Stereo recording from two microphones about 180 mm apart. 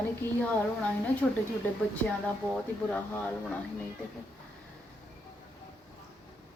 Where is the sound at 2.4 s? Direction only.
5° left (ahead or behind).